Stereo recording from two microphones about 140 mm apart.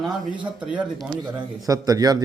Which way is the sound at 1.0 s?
25° right (ahead or behind).